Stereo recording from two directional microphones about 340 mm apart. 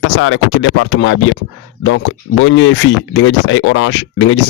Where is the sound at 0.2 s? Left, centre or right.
Left.